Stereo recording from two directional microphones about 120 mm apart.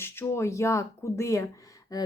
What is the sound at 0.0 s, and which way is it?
Speech, 20° left (ahead or behind).